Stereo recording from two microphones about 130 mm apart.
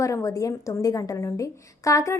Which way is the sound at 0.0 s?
25° left (ahead or behind).